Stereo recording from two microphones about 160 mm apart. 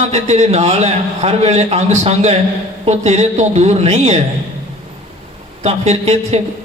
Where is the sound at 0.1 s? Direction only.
45° right (ahead or behind).